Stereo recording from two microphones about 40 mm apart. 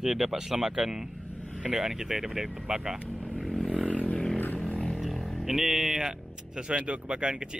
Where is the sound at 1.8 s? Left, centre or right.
Centre.